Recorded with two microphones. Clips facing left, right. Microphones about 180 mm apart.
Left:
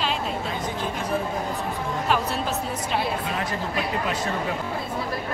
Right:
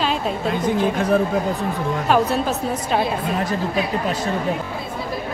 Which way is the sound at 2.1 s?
45° right (ahead or behind).